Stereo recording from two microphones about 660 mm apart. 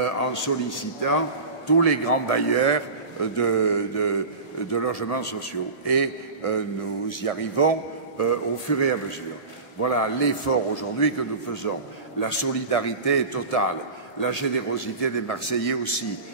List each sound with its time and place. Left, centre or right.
0.0 s a man's voice: left
8.2 s a man's voice: left